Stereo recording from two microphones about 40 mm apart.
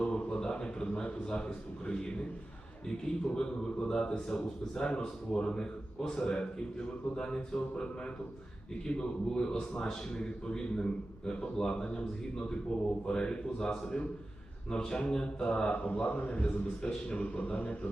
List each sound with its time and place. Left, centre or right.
0.0 s a sound: left
2.8 s a man's voice: centre
15.7 s a man's voice: left
16.8 s a man's voice: left
17.4 s a man's voice: left